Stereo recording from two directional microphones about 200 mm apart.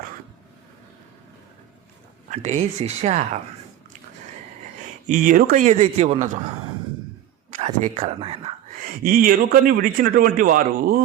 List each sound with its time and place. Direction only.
2.3 s speech: 35° right (ahead or behind)
4.8 s a man's voice: 40° right (ahead or behind)
7.5 s speech: 30° right (ahead or behind)
8.8 s speech: 45° right (ahead or behind)